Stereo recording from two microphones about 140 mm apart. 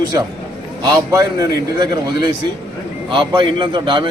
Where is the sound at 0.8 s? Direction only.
25° right (ahead or behind).